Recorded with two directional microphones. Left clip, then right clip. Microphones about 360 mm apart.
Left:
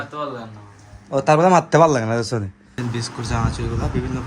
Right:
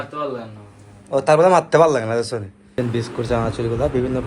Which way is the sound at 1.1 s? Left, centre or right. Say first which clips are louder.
Right 1 dB; left.